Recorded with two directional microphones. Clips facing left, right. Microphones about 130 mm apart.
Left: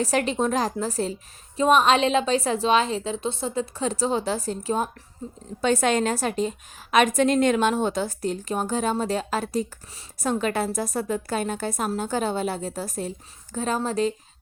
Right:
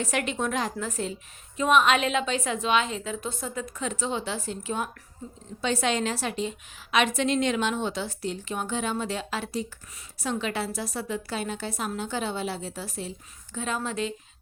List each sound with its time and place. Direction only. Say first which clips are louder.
0.0 s a woman's voice: left 5 dB; 35° left (ahead or behind)
5.2 s a woman's voice: left 5 dB; 25° left (ahead or behind)
5.6 s a woman's voice: left 5 dB; 50° left (ahead or behind)